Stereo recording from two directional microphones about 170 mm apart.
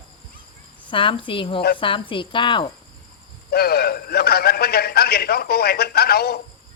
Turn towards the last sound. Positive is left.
turn(degrees=65)  # may be behind; listen again after turning